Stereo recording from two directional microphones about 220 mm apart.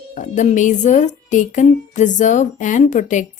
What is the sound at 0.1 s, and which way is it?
A woman's voice, 35° left (ahead or behind).